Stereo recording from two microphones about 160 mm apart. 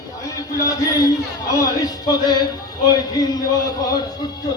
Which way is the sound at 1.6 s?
25° left (ahead or behind).